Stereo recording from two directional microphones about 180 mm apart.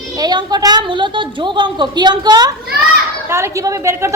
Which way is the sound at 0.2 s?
25° right (ahead or behind).